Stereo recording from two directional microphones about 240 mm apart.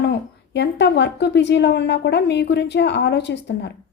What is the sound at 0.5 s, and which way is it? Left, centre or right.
A woman's voice, left.